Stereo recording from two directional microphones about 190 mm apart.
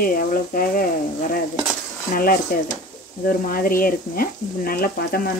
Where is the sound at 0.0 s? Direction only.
50° left (ahead or behind).